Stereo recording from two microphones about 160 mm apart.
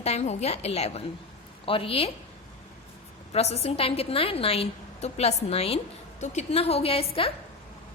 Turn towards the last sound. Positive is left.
turn(degrees=35)  # may be behind; listen again after turning